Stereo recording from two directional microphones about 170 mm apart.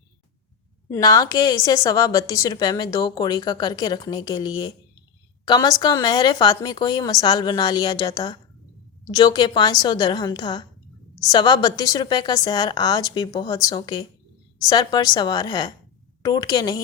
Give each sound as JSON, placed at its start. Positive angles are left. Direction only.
{"t": 0.9, "sound": "speech", "side_deg": 20}